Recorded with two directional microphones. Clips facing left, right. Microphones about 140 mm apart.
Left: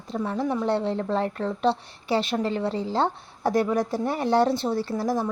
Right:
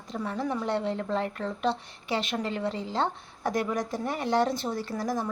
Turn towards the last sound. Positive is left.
turn(degrees=30)  # may be behind; listen again after turning